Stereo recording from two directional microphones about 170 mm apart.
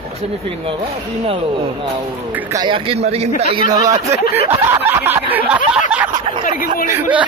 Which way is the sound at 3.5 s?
20° right (ahead or behind).